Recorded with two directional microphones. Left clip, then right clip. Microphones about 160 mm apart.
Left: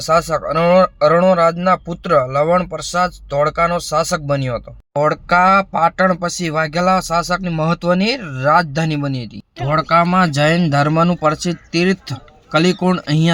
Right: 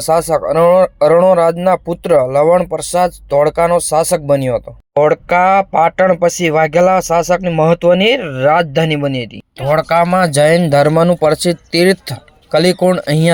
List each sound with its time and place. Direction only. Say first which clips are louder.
0.0 s speech: right 3 dB; 20° right (ahead or behind)